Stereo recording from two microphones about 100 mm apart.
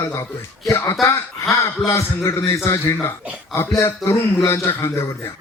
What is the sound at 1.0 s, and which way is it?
A man's voice, 30° left (ahead or behind).